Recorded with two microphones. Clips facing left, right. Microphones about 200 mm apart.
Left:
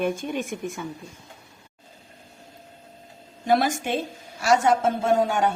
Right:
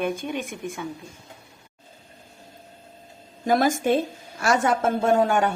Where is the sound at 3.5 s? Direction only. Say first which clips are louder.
Right 2 dB; 50° right (ahead or behind).